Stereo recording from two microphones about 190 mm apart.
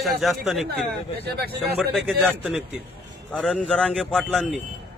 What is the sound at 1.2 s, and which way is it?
Speech, 55° right (ahead or behind).